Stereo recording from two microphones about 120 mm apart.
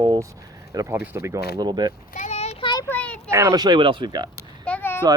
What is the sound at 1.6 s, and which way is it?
Speech, 35° right (ahead or behind).